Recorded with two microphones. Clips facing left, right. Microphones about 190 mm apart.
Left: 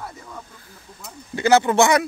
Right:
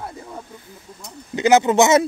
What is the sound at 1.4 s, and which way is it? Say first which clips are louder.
Speech: right 2 dB; 20° right (ahead or behind).